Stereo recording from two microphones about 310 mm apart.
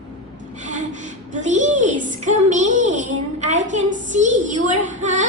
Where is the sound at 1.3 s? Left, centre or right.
Right.